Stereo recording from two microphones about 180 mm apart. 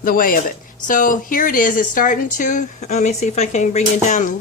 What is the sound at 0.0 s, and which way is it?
Speech, 50° left (ahead or behind).